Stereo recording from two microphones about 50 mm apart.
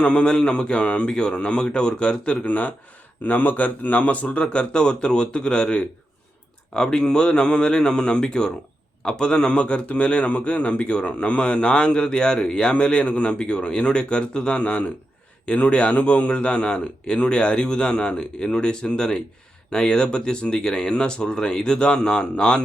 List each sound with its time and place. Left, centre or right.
0.0 s a man's voice: centre
2.5 s speech: left
4.4 s a man's voice: centre